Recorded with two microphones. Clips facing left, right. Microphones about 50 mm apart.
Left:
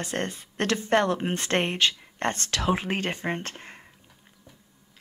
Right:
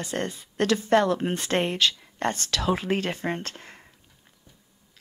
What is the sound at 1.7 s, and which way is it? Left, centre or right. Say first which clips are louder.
Speech: even; left.